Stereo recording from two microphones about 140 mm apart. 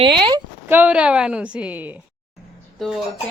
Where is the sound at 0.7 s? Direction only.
10° right (ahead or behind).